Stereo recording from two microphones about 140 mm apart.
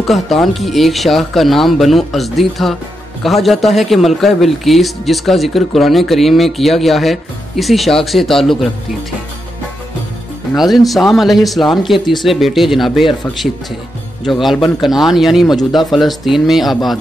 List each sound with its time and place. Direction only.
0.0 s a man's voice: centre (ahead or behind)
10.5 s a man's voice: centre (ahead or behind)